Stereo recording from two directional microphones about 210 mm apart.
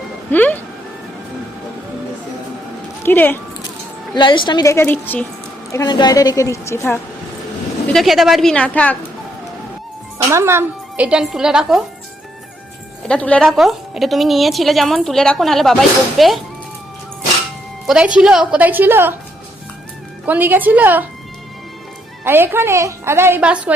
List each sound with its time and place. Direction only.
0.3 s a woman's voice: 10° left (ahead or behind)
3.0 s speech: 10° left (ahead or behind)
4.1 s a woman's voice: 20° left (ahead or behind)
7.9 s a woman's voice: centre (ahead or behind)
10.3 s a woman's voice: 10° right (ahead or behind)
13.1 s a woman's voice: 5° left (ahead or behind)
17.8 s a woman's voice: 5° right (ahead or behind)
20.2 s a woman's voice: 10° right (ahead or behind)
22.2 s a woman's voice: 10° right (ahead or behind)